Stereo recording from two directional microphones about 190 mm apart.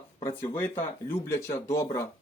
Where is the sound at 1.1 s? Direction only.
15° left (ahead or behind).